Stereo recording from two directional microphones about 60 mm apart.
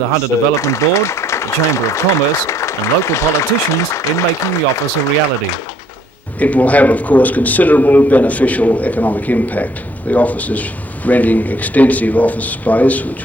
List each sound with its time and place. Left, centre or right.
0.2 s a man's voice: left
6.4 s a man's voice: left